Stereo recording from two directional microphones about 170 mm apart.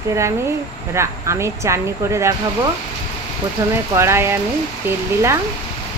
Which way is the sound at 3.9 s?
15° right (ahead or behind).